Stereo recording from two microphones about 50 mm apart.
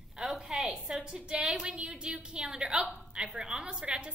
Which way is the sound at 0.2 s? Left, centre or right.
Centre.